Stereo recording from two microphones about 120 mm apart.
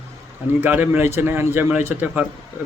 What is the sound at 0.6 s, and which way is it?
Speech, 15° right (ahead or behind).